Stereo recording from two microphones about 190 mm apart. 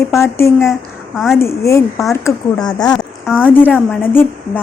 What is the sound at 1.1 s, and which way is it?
Speech, centre (ahead or behind).